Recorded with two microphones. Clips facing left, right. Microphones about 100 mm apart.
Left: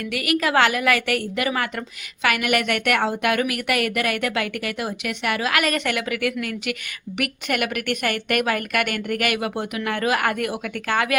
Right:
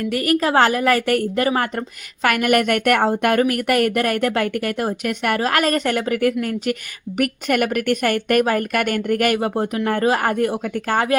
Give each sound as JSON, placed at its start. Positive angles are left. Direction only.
{"t": 0.0, "sound": "speech", "side_deg": -40}